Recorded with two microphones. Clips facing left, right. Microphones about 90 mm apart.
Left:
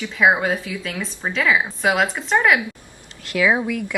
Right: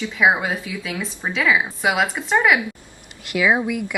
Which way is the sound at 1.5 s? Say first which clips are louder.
Even; 5° left (ahead or behind).